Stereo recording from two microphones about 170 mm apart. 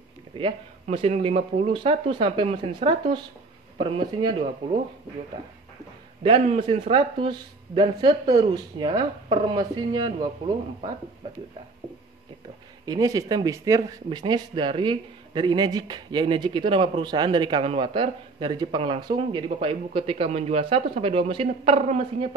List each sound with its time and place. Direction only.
0.8 s speech: 35° right (ahead or behind)
6.2 s speech: 35° right (ahead or behind)
12.8 s speech: 20° right (ahead or behind); by 22.3 s 35° right (ahead or behind)